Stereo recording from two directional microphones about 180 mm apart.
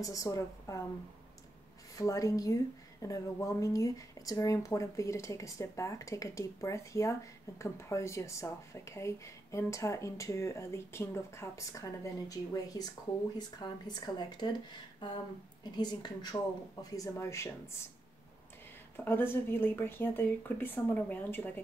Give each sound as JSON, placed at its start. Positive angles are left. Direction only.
{"t": 0.0, "sound": "a woman's voice", "side_deg": 20}
{"t": 2.0, "sound": "a woman's voice", "side_deg": 20}
{"t": 15.6, "sound": "a woman's voice", "side_deg": 25}
{"t": 18.9, "sound": "a woman's voice", "side_deg": 10}